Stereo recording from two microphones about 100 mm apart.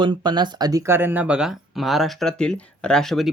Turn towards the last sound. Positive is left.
turn(degrees=0)  # may be behind; listen again after turning